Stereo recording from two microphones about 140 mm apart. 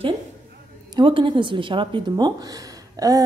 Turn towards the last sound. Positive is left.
turn(degrees=-25)  # may be behind; listen again after turning